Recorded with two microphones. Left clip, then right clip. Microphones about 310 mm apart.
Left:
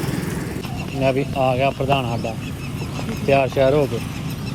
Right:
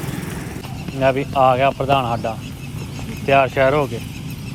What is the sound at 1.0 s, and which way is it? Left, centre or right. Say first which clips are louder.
Speech: right 4 dB; right.